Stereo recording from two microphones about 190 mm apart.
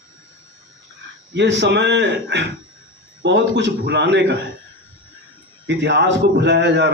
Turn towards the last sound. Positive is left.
turn(degrees=-65)  # may be behind; listen again after turning